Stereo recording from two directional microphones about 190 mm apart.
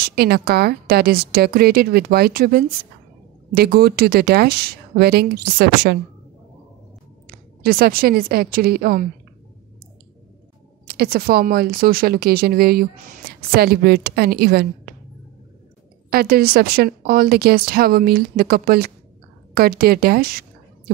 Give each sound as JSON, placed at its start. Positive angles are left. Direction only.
{"t": 0.1, "sound": "a woman's voice", "side_deg": -55}
{"t": 7.6, "sound": "speech", "side_deg": -50}
{"t": 10.9, "sound": "speech", "side_deg": -50}
{"t": 16.1, "sound": "speech", "side_deg": -55}